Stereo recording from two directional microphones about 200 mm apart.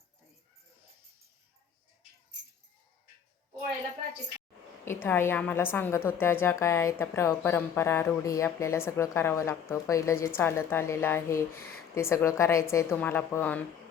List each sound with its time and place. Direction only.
4.9 s speech: 10° left (ahead or behind)